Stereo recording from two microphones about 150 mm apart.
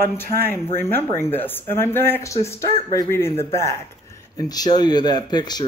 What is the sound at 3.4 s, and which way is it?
Speech, 20° left (ahead or behind).